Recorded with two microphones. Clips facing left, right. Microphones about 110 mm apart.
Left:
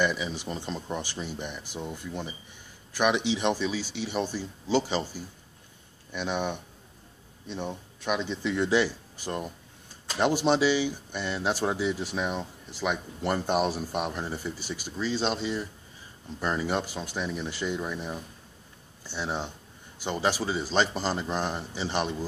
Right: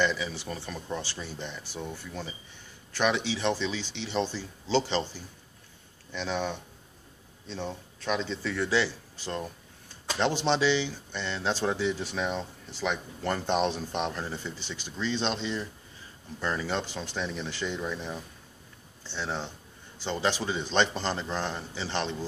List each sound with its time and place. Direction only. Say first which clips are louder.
0.0 s speech: left 1 dB; 15° left (ahead or behind)